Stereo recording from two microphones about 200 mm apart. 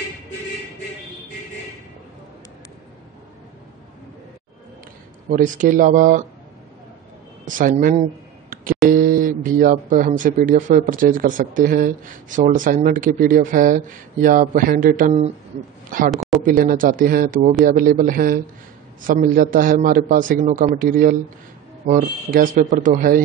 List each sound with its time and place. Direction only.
5.3 s speech: 40° right (ahead or behind)
7.4 s speech: 40° right (ahead or behind)
8.8 s a sound: 45° right (ahead or behind)
9.6 s a man's voice: 40° right (ahead or behind)